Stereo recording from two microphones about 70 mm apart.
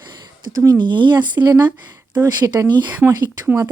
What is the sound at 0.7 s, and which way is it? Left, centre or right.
Speech, right.